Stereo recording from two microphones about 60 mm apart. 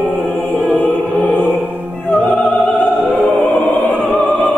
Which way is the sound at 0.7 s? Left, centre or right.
Left.